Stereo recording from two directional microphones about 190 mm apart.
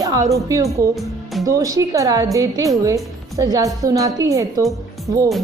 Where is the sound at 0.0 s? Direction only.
20° right (ahead or behind).